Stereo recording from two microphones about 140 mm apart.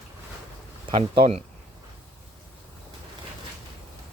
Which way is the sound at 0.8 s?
35° right (ahead or behind).